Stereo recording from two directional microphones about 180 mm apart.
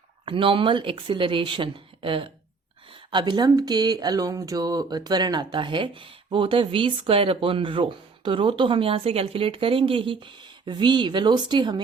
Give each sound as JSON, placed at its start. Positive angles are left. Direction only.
{"t": 0.3, "sound": "speech", "side_deg": -30}